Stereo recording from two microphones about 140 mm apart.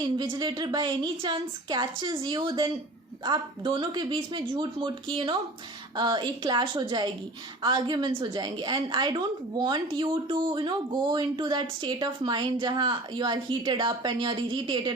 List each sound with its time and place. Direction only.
0.0 s a woman's voice: 30° right (ahead or behind)